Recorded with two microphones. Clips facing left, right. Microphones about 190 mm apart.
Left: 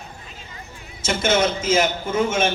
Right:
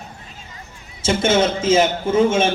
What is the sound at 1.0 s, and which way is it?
A man's voice, 30° right (ahead or behind).